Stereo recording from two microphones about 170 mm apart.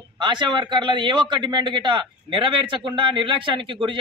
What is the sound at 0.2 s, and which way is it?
A man's voice, 25° right (ahead or behind).